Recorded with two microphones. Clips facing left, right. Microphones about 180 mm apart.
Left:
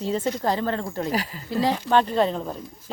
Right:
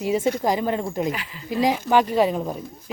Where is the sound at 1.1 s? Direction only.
40° left (ahead or behind).